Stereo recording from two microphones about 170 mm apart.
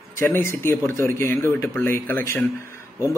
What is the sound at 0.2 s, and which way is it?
Speech, 15° left (ahead or behind).